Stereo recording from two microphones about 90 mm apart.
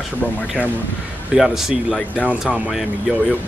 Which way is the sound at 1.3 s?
5° right (ahead or behind).